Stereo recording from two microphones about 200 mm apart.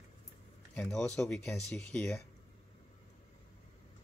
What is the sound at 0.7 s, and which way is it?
Speech, 5° left (ahead or behind).